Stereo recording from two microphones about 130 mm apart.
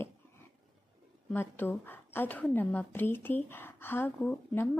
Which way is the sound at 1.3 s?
15° left (ahead or behind).